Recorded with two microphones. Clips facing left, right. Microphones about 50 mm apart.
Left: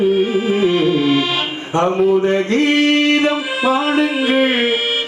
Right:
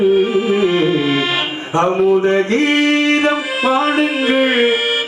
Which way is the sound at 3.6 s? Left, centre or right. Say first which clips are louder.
Right 1 dB; centre.